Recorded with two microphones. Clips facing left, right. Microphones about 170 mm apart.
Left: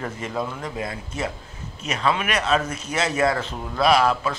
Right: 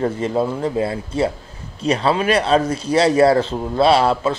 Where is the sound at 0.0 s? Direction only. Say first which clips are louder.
Right 9 dB; 30° right (ahead or behind).